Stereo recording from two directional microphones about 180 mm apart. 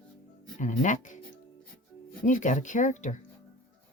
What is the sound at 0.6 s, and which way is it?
Speech, 45° left (ahead or behind).